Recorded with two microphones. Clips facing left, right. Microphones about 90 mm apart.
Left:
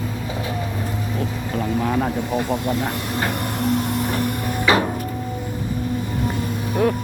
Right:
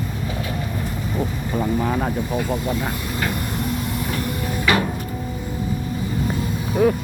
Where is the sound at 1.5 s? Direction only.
5° right (ahead or behind).